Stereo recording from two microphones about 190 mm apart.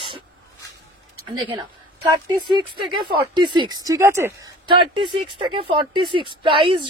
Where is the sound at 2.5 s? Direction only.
25° right (ahead or behind).